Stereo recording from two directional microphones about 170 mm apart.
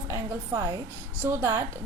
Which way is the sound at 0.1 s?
20° right (ahead or behind).